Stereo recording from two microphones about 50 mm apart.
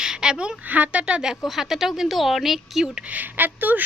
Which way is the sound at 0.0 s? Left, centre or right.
Centre.